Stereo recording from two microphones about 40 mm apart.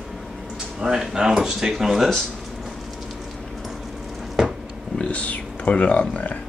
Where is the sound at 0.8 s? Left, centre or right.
Centre.